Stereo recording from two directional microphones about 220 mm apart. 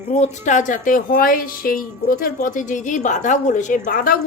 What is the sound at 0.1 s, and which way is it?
A woman's voice, 30° left (ahead or behind).